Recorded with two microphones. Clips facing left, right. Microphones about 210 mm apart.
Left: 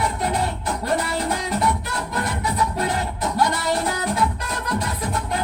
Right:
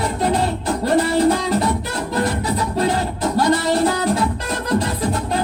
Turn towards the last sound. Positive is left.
turn(degrees=-30)  # may be behind; listen again after turning